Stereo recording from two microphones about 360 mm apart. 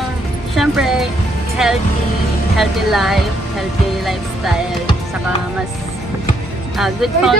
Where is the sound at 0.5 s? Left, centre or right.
Centre.